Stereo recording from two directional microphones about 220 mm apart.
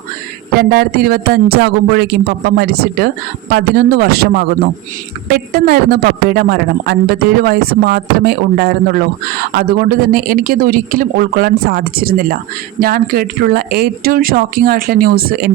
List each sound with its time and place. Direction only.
0.6 s speech: 45° right (ahead or behind)
5.3 s speech: 40° right (ahead or behind)